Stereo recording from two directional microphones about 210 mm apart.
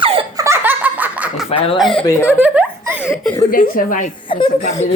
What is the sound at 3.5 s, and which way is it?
Speech, 40° left (ahead or behind).